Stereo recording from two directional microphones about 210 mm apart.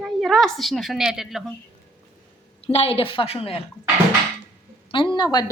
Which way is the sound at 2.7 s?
30° left (ahead or behind).